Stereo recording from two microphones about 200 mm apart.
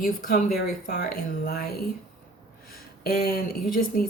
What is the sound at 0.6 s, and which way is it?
Speech, 50° left (ahead or behind).